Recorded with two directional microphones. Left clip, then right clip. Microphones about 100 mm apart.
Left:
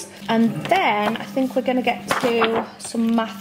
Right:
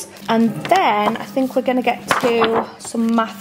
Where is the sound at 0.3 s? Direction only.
20° right (ahead or behind).